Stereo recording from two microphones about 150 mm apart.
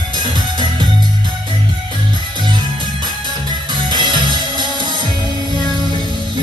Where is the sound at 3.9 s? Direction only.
30° right (ahead or behind).